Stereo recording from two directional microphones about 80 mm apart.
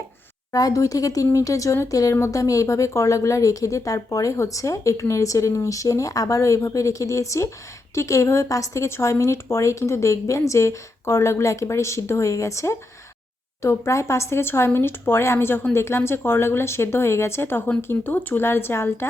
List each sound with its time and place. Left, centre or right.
0.5 s a woman's voice: left